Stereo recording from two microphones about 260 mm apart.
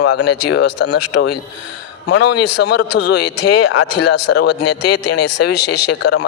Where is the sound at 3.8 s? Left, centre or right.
Left.